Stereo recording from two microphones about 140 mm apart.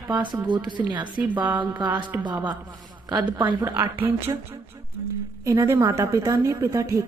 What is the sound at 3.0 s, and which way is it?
Speech, 30° right (ahead or behind).